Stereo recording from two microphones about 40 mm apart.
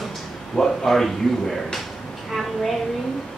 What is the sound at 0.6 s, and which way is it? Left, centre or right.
Speech, centre.